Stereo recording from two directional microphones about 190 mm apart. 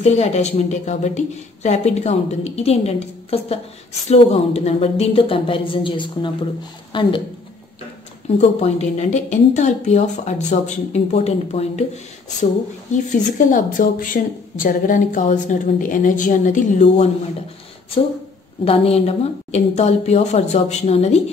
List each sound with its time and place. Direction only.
0.0 s a woman's voice: 35° left (ahead or behind)
8.4 s a woman's voice: 35° left (ahead or behind)
12.9 s a woman's voice: 40° left (ahead or behind)
18.6 s a woman's voice: 30° left (ahead or behind)